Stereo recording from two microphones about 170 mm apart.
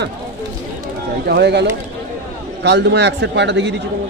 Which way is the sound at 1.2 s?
75° right (ahead or behind).